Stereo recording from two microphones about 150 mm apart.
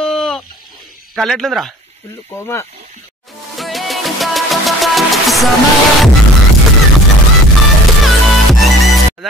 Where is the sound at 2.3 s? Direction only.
15° left (ahead or behind).